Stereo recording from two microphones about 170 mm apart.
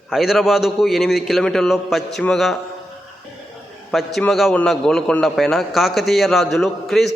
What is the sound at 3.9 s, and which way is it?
A man's voice, centre (ahead or behind).